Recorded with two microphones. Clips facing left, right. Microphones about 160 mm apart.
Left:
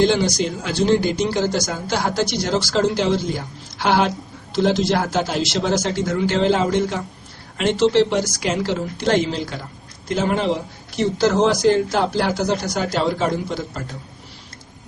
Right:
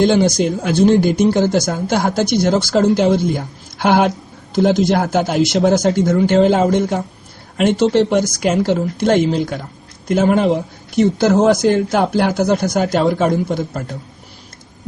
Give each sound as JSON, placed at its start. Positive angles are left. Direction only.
{"t": 0.0, "sound": "speech", "side_deg": -50}